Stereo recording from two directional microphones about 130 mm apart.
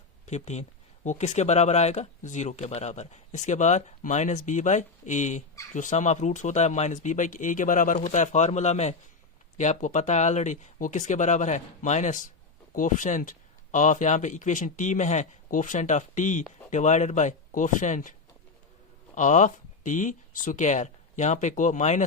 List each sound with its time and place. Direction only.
0.3 s speech: 60° left (ahead or behind); by 7.9 s 85° left
7.9 s speech: 65° left (ahead or behind)
19.1 s speech: 70° left (ahead or behind)